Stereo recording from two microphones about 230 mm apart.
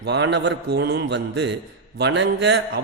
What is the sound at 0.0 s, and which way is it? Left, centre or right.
A man's voice, right.